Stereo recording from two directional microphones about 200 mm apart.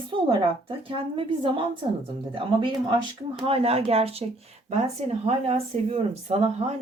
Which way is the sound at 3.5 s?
30° right (ahead or behind).